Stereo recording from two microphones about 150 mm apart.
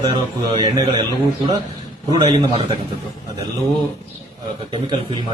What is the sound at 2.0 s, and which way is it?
Speech, 40° right (ahead or behind).